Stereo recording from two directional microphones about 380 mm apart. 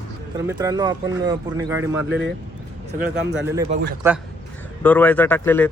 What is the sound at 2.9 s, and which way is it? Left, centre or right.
Speech, right.